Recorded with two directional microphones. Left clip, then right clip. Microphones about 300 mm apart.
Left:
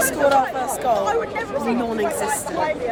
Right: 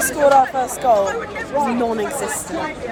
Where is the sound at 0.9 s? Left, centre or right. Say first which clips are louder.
Right 6 dB; centre.